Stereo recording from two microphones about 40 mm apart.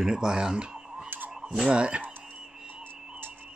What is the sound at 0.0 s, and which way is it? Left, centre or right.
Speech, centre.